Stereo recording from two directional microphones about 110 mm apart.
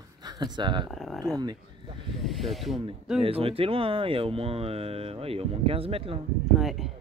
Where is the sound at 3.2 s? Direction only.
60° right (ahead or behind).